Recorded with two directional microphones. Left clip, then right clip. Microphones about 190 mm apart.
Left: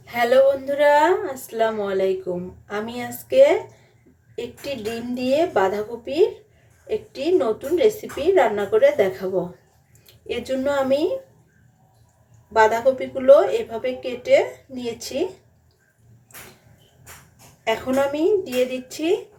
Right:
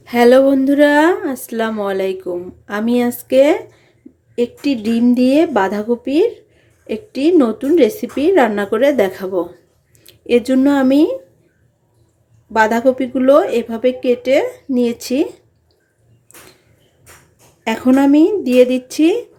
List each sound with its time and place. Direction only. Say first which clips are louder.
0.0 s speech: right 6 dB; 55° right (ahead or behind)
10.2 s speech: right 10 dB; 55° right (ahead or behind)
12.5 s speech: right 4 dB; 60° right (ahead or behind)
17.6 s speech: right 6 dB; 60° right (ahead or behind)